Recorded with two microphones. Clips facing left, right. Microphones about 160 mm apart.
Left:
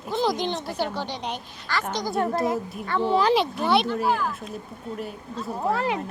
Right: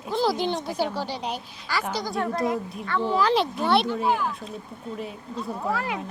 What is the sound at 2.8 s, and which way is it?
Speech, 30° left (ahead or behind).